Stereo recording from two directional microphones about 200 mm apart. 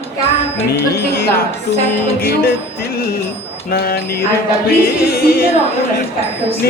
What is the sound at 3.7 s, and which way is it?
Music, 50° left (ahead or behind).